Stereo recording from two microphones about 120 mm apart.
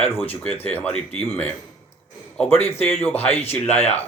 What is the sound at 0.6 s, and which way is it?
Speech, 15° left (ahead or behind).